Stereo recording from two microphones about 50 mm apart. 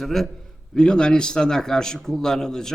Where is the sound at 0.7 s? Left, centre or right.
Centre.